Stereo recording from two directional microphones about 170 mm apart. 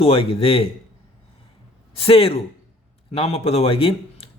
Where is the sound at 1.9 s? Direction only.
35° left (ahead or behind).